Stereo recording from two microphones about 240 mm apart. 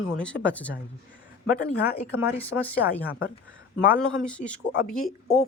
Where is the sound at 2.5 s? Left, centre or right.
Left.